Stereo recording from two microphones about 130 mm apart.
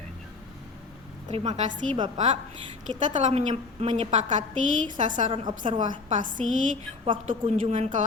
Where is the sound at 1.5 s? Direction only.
70° right (ahead or behind).